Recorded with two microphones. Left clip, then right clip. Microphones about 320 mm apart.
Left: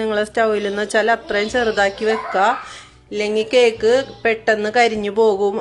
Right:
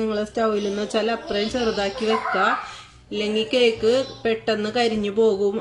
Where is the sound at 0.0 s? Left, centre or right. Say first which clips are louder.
Left 5 dB; left.